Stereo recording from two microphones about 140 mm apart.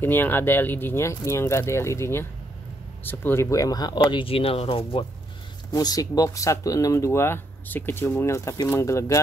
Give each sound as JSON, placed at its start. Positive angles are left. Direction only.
{"t": 0.0, "sound": "speech", "side_deg": 15}
{"t": 5.7, "sound": "speech", "side_deg": 25}